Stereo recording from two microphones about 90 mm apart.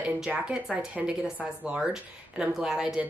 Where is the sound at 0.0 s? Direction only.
10° right (ahead or behind).